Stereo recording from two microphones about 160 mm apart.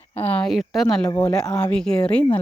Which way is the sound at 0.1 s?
10° left (ahead or behind).